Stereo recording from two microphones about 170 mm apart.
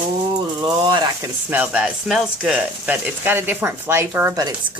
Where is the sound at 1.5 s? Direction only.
10° right (ahead or behind).